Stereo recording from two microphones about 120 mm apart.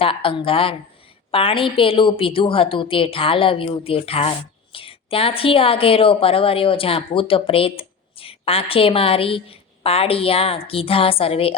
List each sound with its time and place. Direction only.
0.0 s a woman's voice: 45° left (ahead or behind)